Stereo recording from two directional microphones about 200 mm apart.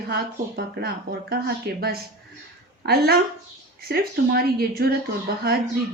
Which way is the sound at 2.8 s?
50° right (ahead or behind).